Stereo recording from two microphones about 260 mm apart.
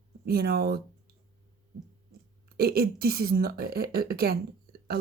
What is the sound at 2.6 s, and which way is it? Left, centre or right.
Speech, right.